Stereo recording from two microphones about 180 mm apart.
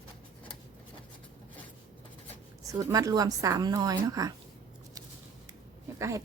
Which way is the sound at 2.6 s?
20° right (ahead or behind).